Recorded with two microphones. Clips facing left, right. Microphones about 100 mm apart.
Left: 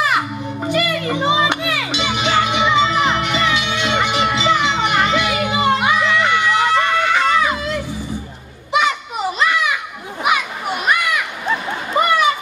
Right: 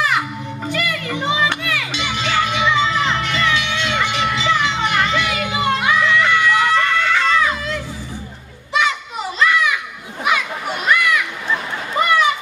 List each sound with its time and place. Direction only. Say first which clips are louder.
0.0 s music: left 1 dB; 20° left (ahead or behind)
8.7 s children playing: left 2 dB; 20° left (ahead or behind)
11.9 s a sound: left 1 dB; 15° left (ahead or behind)